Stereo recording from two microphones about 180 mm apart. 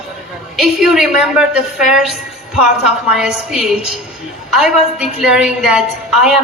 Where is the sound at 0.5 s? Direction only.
5° right (ahead or behind).